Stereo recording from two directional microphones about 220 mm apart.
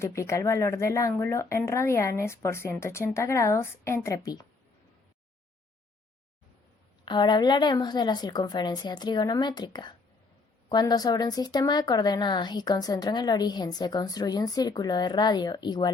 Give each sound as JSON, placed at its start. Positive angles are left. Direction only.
{"t": 0.0, "sound": "speech", "side_deg": 15}
{"t": 7.0, "sound": "speech", "side_deg": 20}